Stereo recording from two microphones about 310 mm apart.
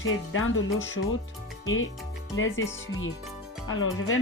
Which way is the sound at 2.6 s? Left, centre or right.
Centre.